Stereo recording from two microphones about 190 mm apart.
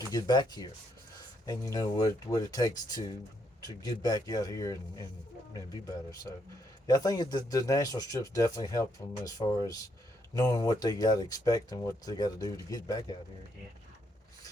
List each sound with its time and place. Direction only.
0.1 s speech: 20° left (ahead or behind)